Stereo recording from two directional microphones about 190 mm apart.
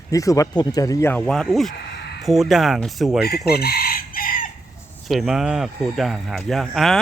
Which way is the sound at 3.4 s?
55° left (ahead or behind).